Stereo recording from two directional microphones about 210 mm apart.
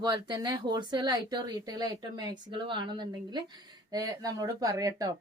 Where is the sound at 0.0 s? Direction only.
20° right (ahead or behind).